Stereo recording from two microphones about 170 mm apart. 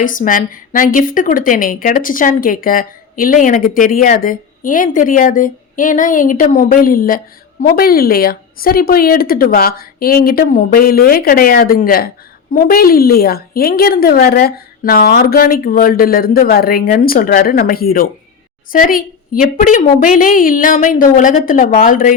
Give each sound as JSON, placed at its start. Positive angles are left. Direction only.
{"t": 0.0, "sound": "a woman's voice", "side_deg": 50}